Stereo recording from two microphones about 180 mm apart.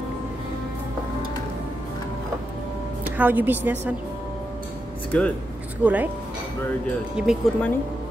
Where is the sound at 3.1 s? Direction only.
10° right (ahead or behind).